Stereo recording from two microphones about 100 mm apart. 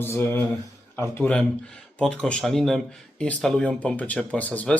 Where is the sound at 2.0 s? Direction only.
10° left (ahead or behind).